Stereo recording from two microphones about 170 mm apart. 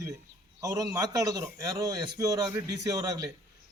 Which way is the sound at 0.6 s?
20° right (ahead or behind).